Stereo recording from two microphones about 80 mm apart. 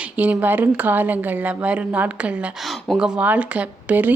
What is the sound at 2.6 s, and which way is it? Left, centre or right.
Speech, centre.